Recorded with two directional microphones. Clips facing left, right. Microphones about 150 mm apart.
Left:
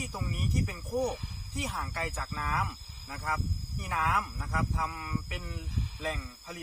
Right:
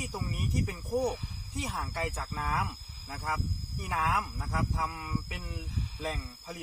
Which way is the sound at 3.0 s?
30° right (ahead or behind).